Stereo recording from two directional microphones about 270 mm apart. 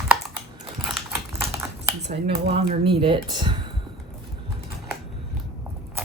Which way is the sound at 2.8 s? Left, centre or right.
Centre.